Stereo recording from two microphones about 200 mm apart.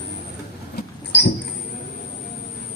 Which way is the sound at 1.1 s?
60° left (ahead or behind).